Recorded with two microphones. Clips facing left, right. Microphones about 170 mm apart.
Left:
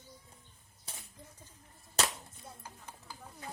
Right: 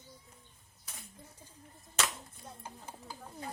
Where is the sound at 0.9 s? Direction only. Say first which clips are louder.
Left 2 dB; 30° left (ahead or behind).